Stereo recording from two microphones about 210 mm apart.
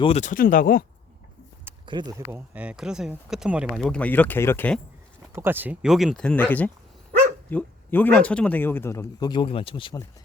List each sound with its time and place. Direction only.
0.0 s speech: 30° left (ahead or behind)
1.9 s speech: 20° right (ahead or behind); by 4.8 s 10° left (ahead or behind)
5.3 s speech: 10° right (ahead or behind); by 10.1 s 20° left (ahead or behind)